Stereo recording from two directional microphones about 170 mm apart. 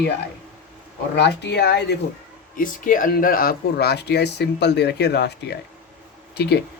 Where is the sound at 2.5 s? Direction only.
55° left (ahead or behind).